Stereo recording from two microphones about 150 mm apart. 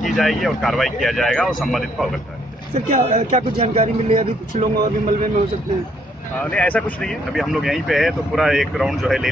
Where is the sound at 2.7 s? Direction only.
45° right (ahead or behind).